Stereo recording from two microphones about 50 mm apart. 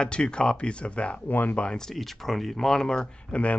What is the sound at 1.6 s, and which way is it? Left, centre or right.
Speech, centre.